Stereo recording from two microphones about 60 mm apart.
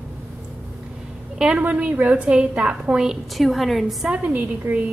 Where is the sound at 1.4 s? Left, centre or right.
Centre.